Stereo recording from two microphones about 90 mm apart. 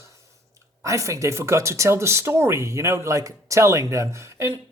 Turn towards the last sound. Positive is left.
turn(degrees=-30)  # may be behind; listen again after turning